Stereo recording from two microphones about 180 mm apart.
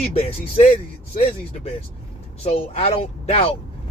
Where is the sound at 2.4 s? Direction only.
35° left (ahead or behind).